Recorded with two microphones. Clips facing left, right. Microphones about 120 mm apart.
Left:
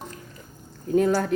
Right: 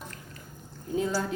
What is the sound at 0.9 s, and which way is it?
Speech, 60° left (ahead or behind).